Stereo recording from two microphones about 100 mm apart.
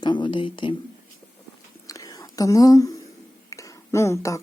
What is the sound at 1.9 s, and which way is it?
Whispering, 35° left (ahead or behind).